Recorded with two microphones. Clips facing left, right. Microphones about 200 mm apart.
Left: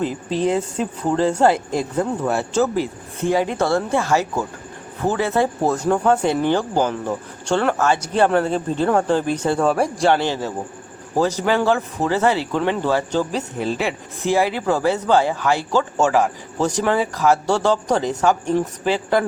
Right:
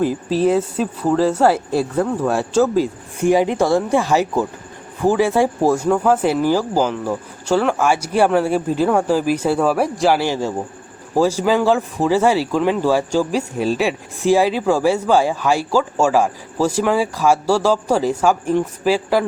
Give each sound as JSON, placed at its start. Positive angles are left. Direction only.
{"t": 0.3, "sound": "speech", "side_deg": -5}